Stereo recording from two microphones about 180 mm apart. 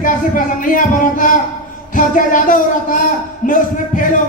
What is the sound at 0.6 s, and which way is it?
Speech, 50° left (ahead or behind).